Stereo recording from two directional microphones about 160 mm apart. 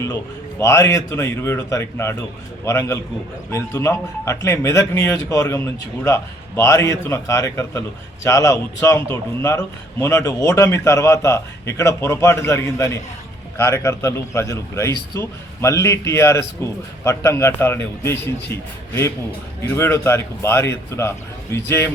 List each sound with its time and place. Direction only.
0.6 s a man's voice: 20° left (ahead or behind)